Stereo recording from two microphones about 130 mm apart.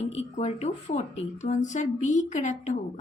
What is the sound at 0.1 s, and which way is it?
Speech, 55° left (ahead or behind).